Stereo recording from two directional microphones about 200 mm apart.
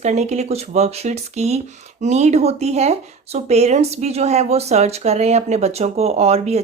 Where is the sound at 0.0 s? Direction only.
35° right (ahead or behind).